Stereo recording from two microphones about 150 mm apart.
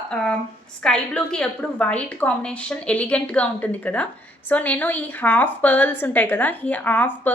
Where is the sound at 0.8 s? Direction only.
5° left (ahead or behind).